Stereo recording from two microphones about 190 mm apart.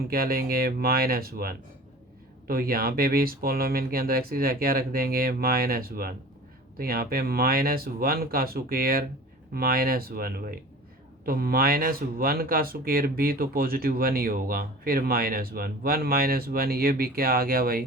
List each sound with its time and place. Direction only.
0.1 s speech: 50° right (ahead or behind)